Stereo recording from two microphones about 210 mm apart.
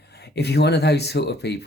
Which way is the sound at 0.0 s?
50° left (ahead or behind).